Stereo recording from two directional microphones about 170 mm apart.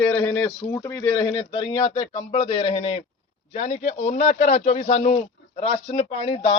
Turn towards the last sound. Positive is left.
turn(degrees=35)  # may be behind; listen again after turning